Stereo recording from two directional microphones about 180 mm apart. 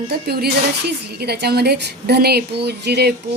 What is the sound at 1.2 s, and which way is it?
A woman's voice, 60° right (ahead or behind).